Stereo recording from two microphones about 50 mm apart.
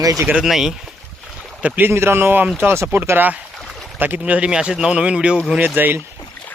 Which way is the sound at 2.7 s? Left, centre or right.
Right.